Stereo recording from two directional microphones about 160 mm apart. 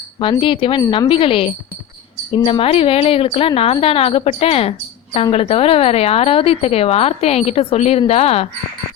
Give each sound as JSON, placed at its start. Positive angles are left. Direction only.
{"t": 0.2, "sound": "a woman's voice", "side_deg": 30}